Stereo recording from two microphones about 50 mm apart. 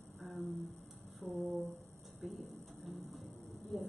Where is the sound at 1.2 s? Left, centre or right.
Right.